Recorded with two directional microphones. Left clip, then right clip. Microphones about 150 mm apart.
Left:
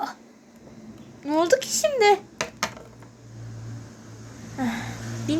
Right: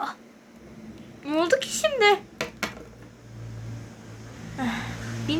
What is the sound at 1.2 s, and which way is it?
Speech, 5° left (ahead or behind).